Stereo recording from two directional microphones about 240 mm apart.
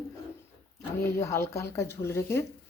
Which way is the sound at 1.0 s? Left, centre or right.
Centre.